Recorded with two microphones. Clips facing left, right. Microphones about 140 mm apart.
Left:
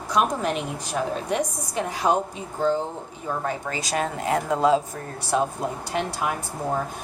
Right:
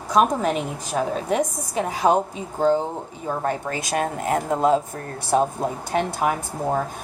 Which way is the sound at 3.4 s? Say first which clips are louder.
Right 3 dB; 55° right (ahead or behind).